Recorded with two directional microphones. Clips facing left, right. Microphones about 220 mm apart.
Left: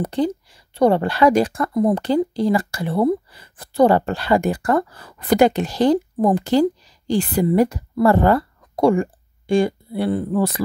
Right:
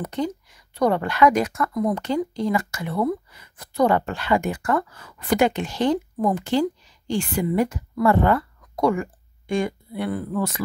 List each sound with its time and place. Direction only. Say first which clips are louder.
0.0 s a woman's voice: left 5 dB; 30° left (ahead or behind)